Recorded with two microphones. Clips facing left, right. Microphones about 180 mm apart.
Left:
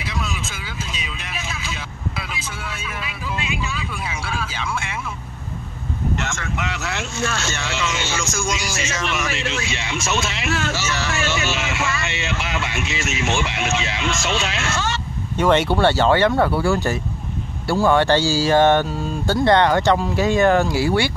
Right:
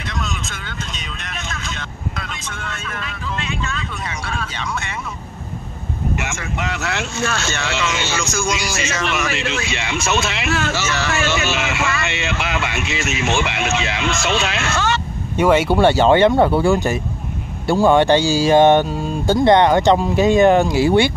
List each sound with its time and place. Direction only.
0.0 s speech: 5° left (ahead or behind)
6.1 s speech: 15° right (ahead or behind)
6.5 s speech: 40° right (ahead or behind)
6.8 s speech: 75° right (ahead or behind)
15.3 s speech: 10° right (ahead or behind)